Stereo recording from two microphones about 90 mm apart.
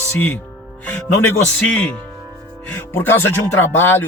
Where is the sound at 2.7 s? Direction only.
25° left (ahead or behind).